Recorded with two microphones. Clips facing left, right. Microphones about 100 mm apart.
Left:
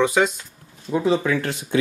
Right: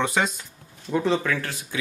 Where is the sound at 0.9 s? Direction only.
10° left (ahead or behind).